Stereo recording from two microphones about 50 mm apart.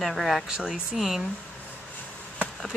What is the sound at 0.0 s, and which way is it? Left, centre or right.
Speech, centre.